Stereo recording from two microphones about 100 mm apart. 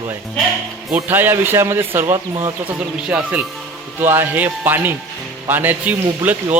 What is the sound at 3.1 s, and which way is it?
A man's voice, 15° right (ahead or behind).